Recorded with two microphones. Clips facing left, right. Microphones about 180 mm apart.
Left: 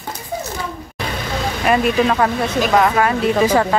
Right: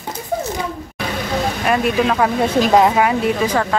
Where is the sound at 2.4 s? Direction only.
25° right (ahead or behind).